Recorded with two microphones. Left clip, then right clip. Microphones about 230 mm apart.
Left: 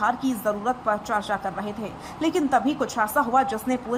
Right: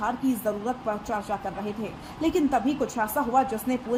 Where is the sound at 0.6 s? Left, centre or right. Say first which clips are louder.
Left 5 dB; left.